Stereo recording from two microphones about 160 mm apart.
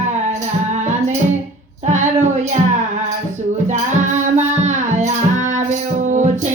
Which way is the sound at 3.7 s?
45° right (ahead or behind).